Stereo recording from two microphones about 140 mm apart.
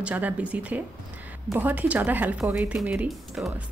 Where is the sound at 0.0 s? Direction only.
10° right (ahead or behind).